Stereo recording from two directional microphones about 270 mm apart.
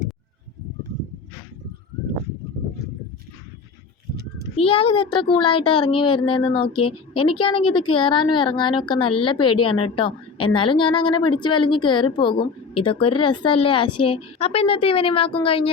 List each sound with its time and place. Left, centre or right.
4.5 s a woman's voice: left